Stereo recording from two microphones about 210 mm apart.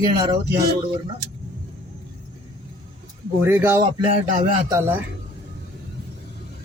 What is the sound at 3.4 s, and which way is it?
Speech, 10° right (ahead or behind).